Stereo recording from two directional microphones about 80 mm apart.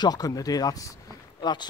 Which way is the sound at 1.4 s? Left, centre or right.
Left.